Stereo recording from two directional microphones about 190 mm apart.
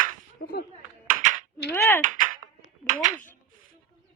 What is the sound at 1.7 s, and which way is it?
Speech, 10° left (ahead or behind).